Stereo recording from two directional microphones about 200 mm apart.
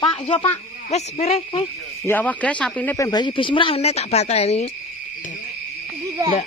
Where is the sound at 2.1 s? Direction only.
10° left (ahead or behind); by 4.6 s 30° left (ahead or behind).